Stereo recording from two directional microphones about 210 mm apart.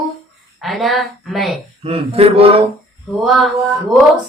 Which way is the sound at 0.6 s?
Centre (ahead or behind).